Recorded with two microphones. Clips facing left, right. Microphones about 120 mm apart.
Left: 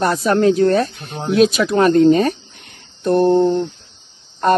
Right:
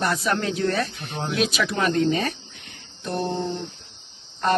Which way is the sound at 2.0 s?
45° left (ahead or behind).